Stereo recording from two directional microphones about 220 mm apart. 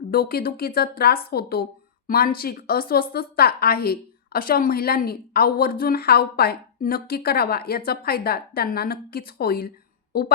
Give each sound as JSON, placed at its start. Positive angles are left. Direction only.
{"t": 0.1, "sound": "a woman's voice", "side_deg": 45}